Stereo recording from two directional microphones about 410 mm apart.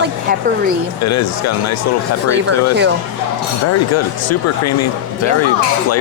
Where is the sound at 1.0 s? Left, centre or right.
Left.